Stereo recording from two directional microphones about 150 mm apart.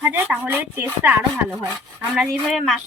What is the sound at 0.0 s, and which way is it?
Speech, 10° right (ahead or behind).